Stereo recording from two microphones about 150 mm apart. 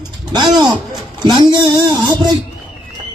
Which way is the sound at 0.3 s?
30° right (ahead or behind).